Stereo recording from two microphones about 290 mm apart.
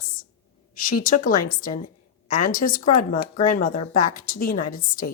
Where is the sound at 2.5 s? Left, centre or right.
Left.